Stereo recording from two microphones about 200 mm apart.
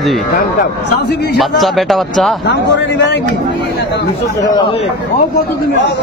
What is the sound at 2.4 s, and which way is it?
Speech, 60° left (ahead or behind).